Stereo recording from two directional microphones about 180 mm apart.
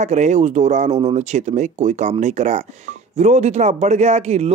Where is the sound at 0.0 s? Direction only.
40° right (ahead or behind).